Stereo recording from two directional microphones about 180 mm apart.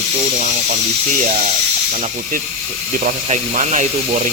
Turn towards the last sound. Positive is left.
turn(degrees=-40)  # may be behind; listen again after turning